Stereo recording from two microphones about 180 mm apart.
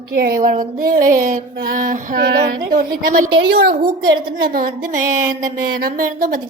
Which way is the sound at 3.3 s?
60° right (ahead or behind).